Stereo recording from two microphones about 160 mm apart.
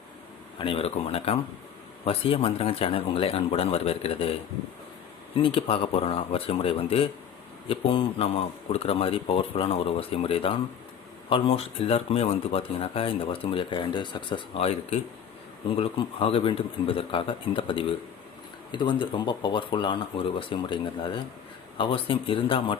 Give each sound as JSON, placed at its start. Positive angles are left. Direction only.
{"t": 0.6, "sound": "speech", "side_deg": 35}
{"t": 5.4, "sound": "speech", "side_deg": 35}